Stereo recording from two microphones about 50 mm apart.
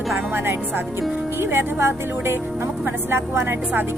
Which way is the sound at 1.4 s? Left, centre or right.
Right.